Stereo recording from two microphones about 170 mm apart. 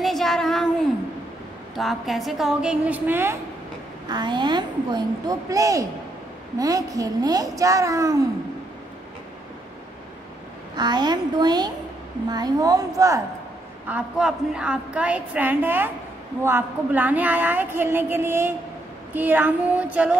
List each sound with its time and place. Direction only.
0.0 s a sound: centre (ahead or behind)
1.8 s a woman's voice: centre (ahead or behind)
4.1 s a woman's voice: 25° right (ahead or behind)
10.8 s a woman's voice: 25° right (ahead or behind)
13.8 s a woman's voice: 5° right (ahead or behind)